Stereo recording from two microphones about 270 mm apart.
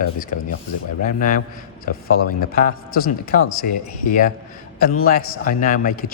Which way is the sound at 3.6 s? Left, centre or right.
Left.